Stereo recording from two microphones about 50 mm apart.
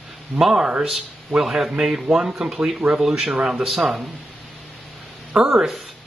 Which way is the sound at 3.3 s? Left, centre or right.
Centre.